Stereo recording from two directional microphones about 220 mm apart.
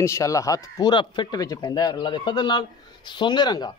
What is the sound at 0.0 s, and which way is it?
Speech, 15° left (ahead or behind).